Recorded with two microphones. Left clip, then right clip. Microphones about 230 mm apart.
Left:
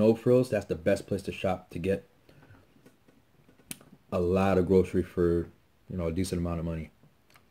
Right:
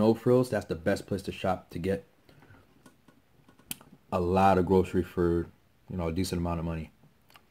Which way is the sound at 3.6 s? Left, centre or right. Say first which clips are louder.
Right 2 dB; centre.